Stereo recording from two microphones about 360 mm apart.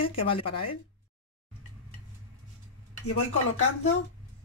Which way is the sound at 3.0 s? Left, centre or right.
Left.